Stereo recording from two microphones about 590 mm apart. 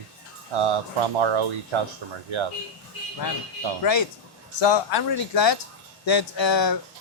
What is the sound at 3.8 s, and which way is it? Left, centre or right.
Speech, left.